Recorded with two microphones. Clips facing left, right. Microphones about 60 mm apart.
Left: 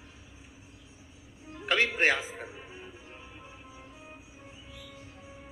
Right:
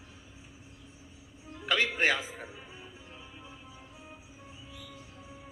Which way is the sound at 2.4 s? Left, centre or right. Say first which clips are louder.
Left 2 dB; centre.